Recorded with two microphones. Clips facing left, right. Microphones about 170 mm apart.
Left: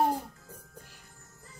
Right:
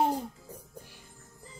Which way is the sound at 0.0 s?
20° right (ahead or behind).